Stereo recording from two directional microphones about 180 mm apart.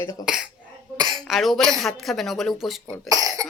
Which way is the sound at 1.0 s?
25° right (ahead or behind).